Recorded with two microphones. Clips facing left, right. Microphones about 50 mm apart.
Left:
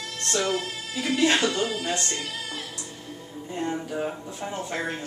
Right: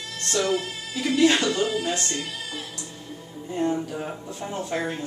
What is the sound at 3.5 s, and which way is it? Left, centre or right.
Speech, centre.